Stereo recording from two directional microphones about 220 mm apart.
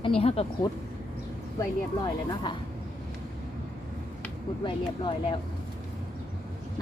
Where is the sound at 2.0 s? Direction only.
20° left (ahead or behind).